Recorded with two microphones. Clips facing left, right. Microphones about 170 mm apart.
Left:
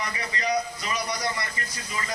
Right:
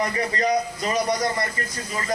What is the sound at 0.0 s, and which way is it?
A man's voice, 45° right (ahead or behind).